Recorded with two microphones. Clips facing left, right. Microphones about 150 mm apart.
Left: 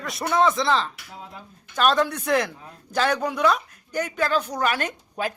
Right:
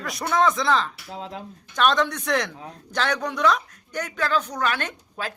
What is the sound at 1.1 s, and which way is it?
Speech, 75° right (ahead or behind).